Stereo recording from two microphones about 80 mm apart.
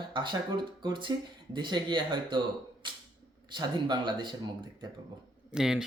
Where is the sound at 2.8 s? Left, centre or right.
Right.